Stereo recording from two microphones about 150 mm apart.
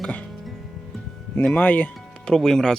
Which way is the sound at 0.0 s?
5° left (ahead or behind).